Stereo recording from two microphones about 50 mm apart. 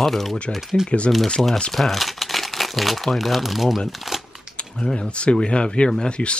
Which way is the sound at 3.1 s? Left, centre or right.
Centre.